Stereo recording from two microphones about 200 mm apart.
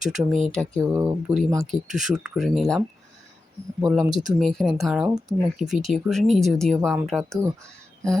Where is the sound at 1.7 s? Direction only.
Centre (ahead or behind).